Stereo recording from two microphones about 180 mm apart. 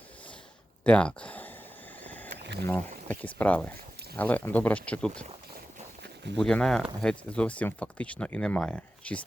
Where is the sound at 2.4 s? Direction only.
70° right (ahead or behind).